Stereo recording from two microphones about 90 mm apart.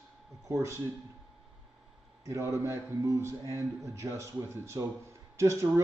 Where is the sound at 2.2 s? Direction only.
35° right (ahead or behind).